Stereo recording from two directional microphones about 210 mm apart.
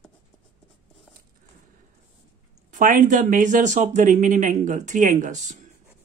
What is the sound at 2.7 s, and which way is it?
Speech, 40° right (ahead or behind).